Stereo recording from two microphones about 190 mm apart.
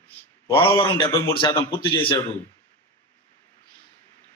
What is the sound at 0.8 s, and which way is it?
A man's voice, 25° left (ahead or behind).